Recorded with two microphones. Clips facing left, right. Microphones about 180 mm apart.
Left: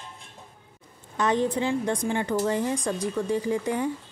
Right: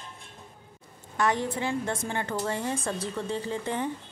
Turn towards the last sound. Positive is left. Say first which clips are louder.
# left 4 dB
turn(degrees=15)  # may be behind; listen again after turning